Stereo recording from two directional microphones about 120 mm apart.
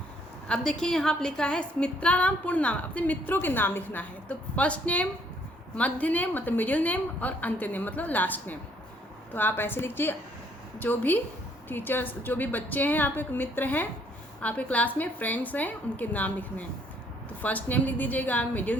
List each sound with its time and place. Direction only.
0.4 s a woman's voice: 5° left (ahead or behind)